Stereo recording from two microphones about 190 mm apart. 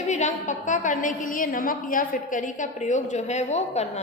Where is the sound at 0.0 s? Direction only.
40° left (ahead or behind).